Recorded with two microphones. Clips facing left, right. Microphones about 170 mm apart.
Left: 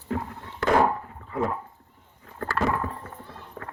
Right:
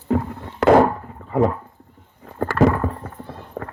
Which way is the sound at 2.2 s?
90° right.